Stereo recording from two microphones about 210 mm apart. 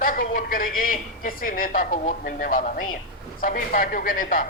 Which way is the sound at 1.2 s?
40° left (ahead or behind).